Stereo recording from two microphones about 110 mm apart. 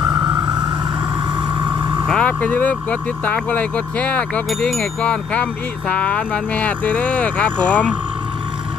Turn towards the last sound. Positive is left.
turn(degrees=10)  # may be behind; listen again after turning